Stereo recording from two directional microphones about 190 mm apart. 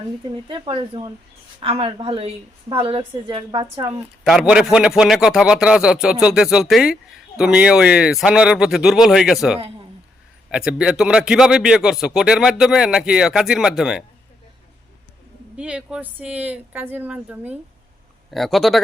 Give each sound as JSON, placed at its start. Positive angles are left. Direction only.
{"t": 0.3, "sound": "a woman's voice", "side_deg": -25}
{"t": 4.2, "sound": "speech", "side_deg": -5}
{"t": 15.5, "sound": "speech", "side_deg": -5}